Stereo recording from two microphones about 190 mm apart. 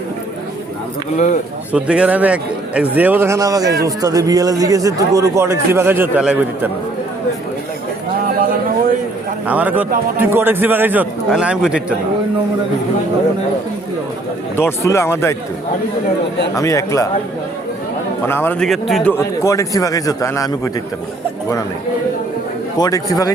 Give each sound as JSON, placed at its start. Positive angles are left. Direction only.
{"t": 1.1, "sound": "a man's voice", "side_deg": 40}
{"t": 1.7, "sound": "a man's voice", "side_deg": -5}
{"t": 9.5, "sound": "a man's voice", "side_deg": -10}
{"t": 14.5, "sound": "a man's voice", "side_deg": 15}
{"t": 16.6, "sound": "a man's voice", "side_deg": 15}
{"t": 18.3, "sound": "a man's voice", "side_deg": 10}
{"t": 19.1, "sound": "a man's voice", "side_deg": 15}
{"t": 22.8, "sound": "a man's voice", "side_deg": 20}